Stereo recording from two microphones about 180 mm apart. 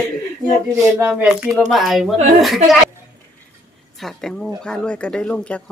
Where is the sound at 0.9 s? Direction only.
10° right (ahead or behind).